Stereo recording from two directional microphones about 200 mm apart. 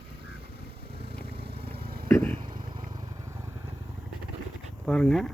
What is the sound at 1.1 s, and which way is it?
Purr, 55° right (ahead or behind).